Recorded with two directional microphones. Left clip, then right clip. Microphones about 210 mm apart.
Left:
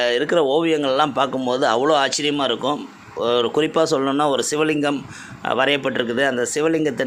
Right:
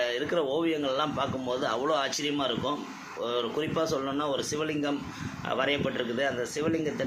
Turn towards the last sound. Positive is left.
turn(degrees=50)  # may be behind; listen again after turning